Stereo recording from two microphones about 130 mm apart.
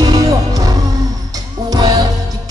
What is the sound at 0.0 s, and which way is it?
Music, 30° right (ahead or behind).